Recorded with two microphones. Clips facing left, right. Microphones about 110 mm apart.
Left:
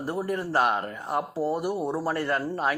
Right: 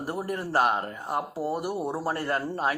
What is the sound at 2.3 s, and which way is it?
Speech, 35° right (ahead or behind).